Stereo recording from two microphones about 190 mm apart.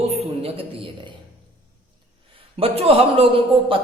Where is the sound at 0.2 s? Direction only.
30° right (ahead or behind).